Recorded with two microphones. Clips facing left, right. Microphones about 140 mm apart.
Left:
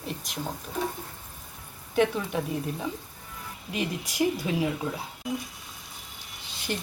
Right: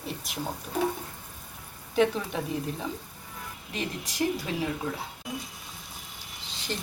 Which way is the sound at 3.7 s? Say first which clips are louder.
Left 3 dB; 10° left (ahead or behind).